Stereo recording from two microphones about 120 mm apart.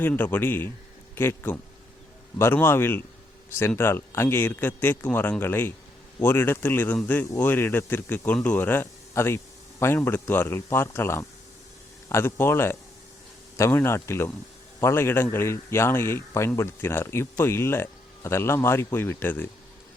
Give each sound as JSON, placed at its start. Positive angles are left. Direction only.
{"t": 0.0, "sound": "a man's voice", "side_deg": 15}